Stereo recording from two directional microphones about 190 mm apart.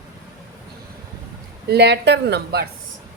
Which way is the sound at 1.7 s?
60° right (ahead or behind).